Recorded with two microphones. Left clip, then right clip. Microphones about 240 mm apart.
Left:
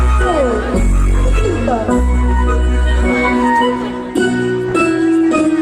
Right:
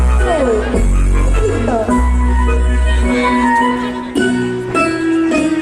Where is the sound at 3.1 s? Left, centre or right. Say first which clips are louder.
Even; left.